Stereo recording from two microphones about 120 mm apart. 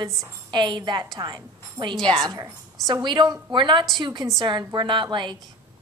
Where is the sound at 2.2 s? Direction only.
30° right (ahead or behind).